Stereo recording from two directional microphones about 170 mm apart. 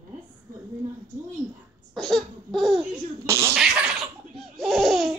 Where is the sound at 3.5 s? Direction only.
5° right (ahead or behind).